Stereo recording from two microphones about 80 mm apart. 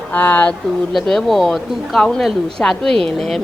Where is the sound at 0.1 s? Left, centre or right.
Left.